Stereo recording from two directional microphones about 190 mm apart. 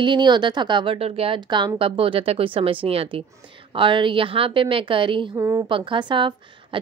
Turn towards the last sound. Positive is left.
turn(degrees=-25)  # may be behind; listen again after turning